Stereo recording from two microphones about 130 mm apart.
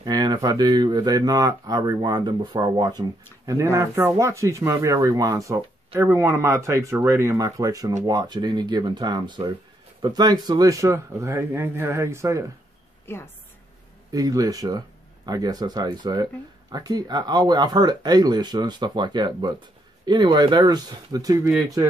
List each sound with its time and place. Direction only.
0.0 s speech: 30° right (ahead or behind)
13.0 s a woman's voice: 20° left (ahead or behind)
14.1 s speech: 25° right (ahead or behind)